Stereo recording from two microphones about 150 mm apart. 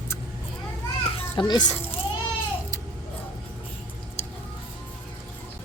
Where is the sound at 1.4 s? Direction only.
30° left (ahead or behind).